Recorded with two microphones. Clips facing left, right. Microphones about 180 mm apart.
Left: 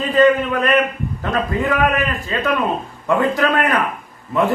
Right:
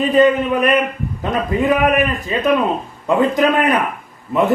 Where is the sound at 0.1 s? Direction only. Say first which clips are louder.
Left 1 dB; 20° right (ahead or behind).